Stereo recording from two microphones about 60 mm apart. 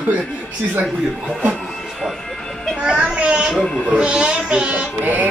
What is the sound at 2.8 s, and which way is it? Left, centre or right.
Music, centre.